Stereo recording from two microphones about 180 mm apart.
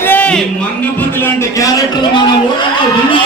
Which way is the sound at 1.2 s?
20° left (ahead or behind).